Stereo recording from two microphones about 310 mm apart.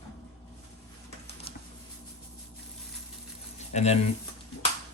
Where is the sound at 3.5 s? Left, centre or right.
Left.